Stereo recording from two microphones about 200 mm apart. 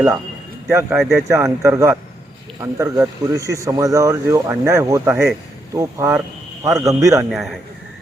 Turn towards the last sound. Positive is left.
turn(degrees=-15)  # may be behind; listen again after turning